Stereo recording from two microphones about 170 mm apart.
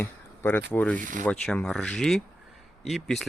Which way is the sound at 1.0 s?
50° right (ahead or behind).